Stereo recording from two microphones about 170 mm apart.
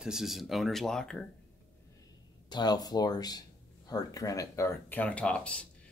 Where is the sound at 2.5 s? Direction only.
25° left (ahead or behind).